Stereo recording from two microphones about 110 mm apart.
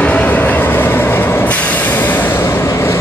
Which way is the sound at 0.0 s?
15° left (ahead or behind).